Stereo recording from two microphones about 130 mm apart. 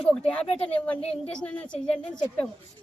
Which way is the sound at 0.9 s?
50° left (ahead or behind).